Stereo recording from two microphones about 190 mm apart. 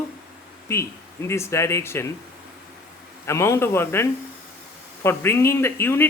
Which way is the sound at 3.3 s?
15° left (ahead or behind).